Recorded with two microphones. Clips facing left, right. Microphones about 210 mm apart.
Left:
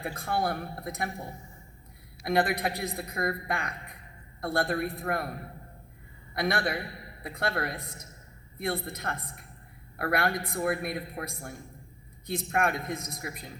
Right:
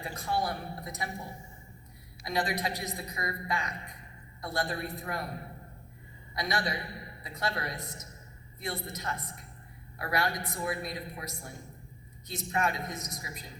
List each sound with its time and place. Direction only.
0.0 s a man's voice: 55° left (ahead or behind)
2.2 s a man's voice: 60° left (ahead or behind)
6.3 s a man's voice: 55° left (ahead or behind)